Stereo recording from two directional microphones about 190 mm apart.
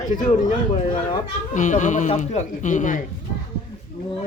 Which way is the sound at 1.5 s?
40° left (ahead or behind).